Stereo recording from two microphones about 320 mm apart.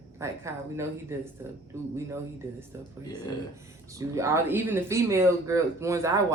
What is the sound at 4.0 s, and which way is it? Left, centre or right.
Speech, centre.